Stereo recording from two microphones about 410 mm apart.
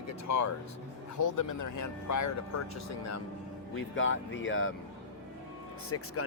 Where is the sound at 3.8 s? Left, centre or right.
Left.